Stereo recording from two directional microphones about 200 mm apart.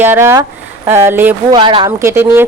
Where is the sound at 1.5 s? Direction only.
25° right (ahead or behind).